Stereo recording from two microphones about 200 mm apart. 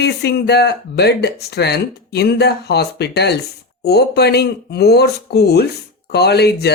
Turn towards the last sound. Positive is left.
turn(degrees=55)  # may be behind; listen again after turning